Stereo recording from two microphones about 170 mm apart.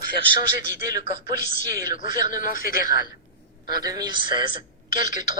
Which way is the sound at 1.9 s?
50° left (ahead or behind).